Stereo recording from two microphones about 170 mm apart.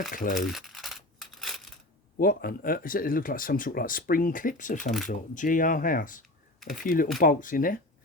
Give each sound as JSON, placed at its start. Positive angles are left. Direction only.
{"t": 0.1, "sound": "speech", "side_deg": 50}
{"t": 0.3, "sound": "crumpling", "side_deg": 0}
{"t": 2.1, "sound": "speech", "side_deg": 55}